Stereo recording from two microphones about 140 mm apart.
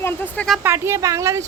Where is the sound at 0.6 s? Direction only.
15° right (ahead or behind).